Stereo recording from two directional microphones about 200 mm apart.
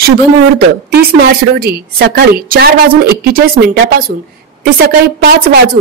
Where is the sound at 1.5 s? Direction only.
50° right (ahead or behind).